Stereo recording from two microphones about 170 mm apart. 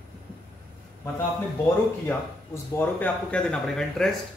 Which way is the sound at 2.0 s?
10° left (ahead or behind).